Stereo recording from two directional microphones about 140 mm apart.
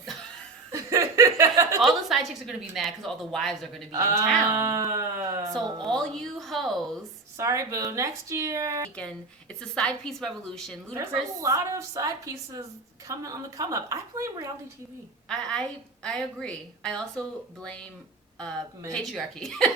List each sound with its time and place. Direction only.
0.7 s chuckle: 20° right (ahead or behind)
1.8 s a woman's voice: centre (ahead or behind)
3.9 s a woman's voice: 25° right (ahead or behind)
5.8 s a woman's voice: 5° left (ahead or behind)
7.3 s a woman's voice: 20° right (ahead or behind)
9.6 s a woman's voice: 5° left (ahead or behind)
10.9 s a woman's voice: 20° right (ahead or behind)
15.3 s a woman's voice: 5° left (ahead or behind)
19.1 s a woman's voice: 5° left (ahead or behind)